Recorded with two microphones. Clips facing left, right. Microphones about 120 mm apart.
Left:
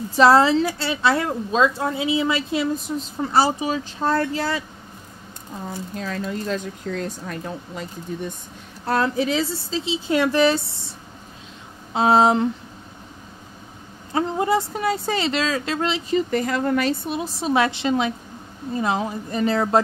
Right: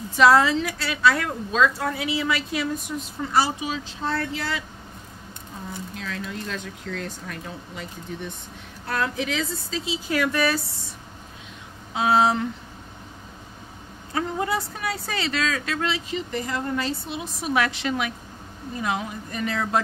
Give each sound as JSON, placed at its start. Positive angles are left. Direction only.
{"t": 0.1, "sound": "a woman's voice", "side_deg": 30}
{"t": 5.7, "sound": "a woman's voice", "side_deg": 40}
{"t": 11.9, "sound": "a woman's voice", "side_deg": 30}
{"t": 14.1, "sound": "a woman's voice", "side_deg": 25}
{"t": 16.3, "sound": "speech", "side_deg": 70}
{"t": 17.1, "sound": "a woman's voice", "side_deg": 35}